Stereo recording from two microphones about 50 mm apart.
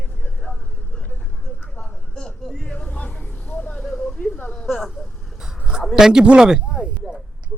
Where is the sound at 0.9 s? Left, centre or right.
Left.